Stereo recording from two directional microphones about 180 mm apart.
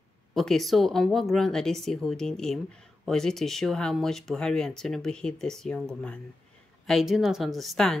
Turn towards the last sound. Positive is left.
turn(degrees=0)  # may be behind; listen again after turning